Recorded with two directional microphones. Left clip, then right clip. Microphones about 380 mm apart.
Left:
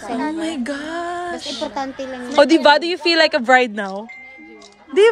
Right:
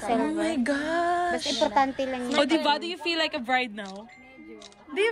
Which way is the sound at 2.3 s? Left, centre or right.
Centre.